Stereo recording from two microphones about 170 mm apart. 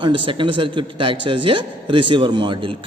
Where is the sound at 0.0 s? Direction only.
30° right (ahead or behind).